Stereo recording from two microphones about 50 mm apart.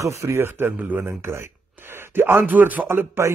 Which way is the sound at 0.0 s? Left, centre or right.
Right.